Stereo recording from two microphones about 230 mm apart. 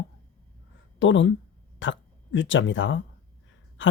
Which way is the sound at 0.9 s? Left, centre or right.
Left.